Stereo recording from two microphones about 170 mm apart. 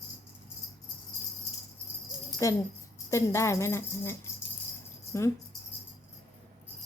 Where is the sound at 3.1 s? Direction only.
15° left (ahead or behind).